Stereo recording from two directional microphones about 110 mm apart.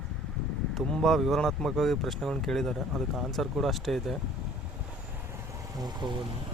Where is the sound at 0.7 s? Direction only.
Centre (ahead or behind).